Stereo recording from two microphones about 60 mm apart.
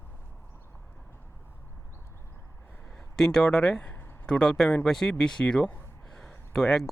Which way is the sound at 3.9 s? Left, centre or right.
Left.